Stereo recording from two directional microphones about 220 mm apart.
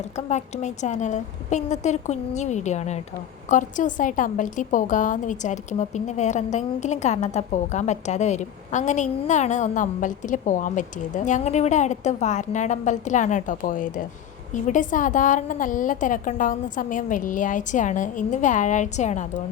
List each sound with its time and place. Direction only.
0.2 s a woman's voice: 30° left (ahead or behind)